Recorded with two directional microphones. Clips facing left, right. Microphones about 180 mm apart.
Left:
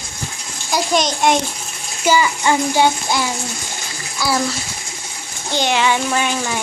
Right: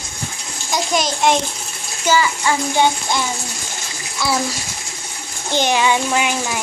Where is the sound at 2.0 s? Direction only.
15° left (ahead or behind).